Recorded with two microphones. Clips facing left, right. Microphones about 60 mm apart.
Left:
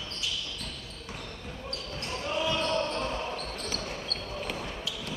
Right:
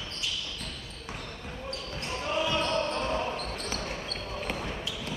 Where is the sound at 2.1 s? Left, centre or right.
Centre.